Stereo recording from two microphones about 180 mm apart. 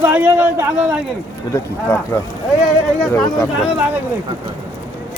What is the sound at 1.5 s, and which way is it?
Speech, 15° left (ahead or behind).